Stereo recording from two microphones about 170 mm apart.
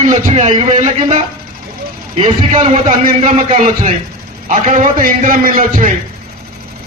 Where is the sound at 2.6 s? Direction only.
40° right (ahead or behind).